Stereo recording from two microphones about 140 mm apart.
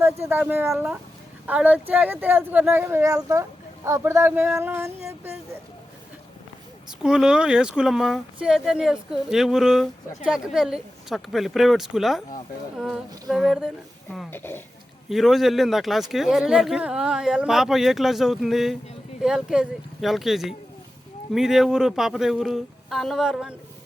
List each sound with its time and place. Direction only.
0.0 s speech: 15° right (ahead or behind)
7.0 s speech: 5° right (ahead or behind)
14.3 s speech: 15° left (ahead or behind)
15.1 s speech: centre (ahead or behind)